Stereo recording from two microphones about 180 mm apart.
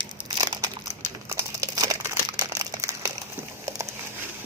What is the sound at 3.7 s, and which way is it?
Patter, 15° right (ahead or behind).